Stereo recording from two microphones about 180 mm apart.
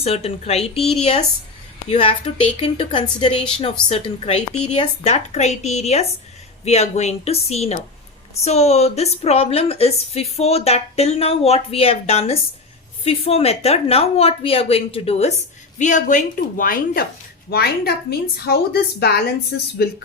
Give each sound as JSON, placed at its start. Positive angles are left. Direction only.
{"t": 0.0, "sound": "a woman's voice", "side_deg": 35}
{"t": 1.9, "sound": "a woman's voice", "side_deg": 35}